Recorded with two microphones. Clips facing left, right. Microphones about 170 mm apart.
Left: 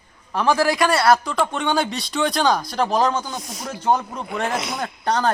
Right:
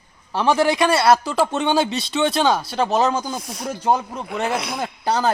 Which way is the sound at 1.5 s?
25° right (ahead or behind).